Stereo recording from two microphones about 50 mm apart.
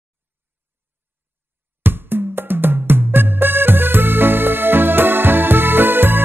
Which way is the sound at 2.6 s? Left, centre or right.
Right.